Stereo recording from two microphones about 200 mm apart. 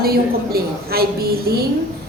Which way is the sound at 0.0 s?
50° right (ahead or behind).